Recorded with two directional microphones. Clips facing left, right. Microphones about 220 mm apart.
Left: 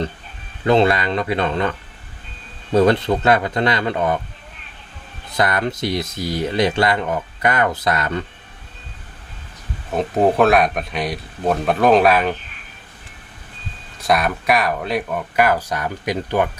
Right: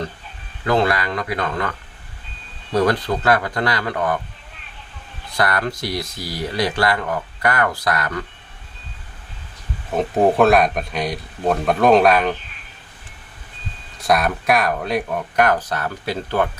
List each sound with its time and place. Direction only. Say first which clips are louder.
0.6 s speech: left 3 dB; 25° left (ahead or behind)
2.7 s speech: left 4 dB; 25° left (ahead or behind)
5.3 s speech: left 1 dB; 20° left (ahead or behind)
9.9 s speech: even; centre (ahead or behind)
14.0 s speech: even; centre (ahead or behind)